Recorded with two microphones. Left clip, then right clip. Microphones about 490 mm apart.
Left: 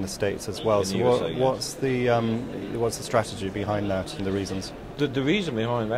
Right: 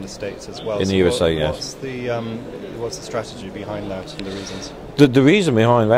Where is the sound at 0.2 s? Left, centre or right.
Left.